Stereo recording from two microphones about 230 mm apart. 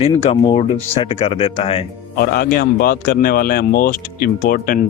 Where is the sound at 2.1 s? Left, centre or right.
Left.